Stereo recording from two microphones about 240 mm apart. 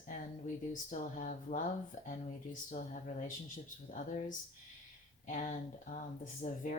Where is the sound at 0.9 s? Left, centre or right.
Left.